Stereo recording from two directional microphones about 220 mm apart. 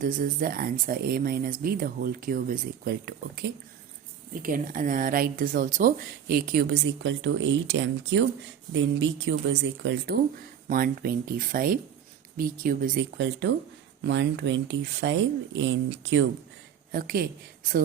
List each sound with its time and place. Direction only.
0.0 s speech: 40° right (ahead or behind)
4.4 s speech: 40° right (ahead or behind)
10.7 s speech: 40° right (ahead or behind)
13.1 s speech: 55° right (ahead or behind)
16.9 s speech: 40° right (ahead or behind)